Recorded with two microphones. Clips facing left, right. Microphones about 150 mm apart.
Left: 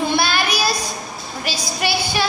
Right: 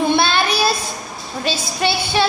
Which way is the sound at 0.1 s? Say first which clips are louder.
Right 3 dB; 25° right (ahead or behind).